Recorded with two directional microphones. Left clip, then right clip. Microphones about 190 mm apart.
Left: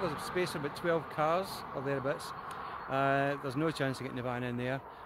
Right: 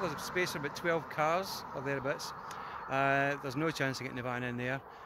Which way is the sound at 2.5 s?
35° left (ahead or behind).